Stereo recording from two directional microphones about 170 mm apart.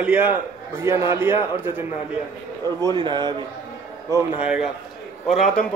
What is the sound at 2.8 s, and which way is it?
Speech, 25° right (ahead or behind).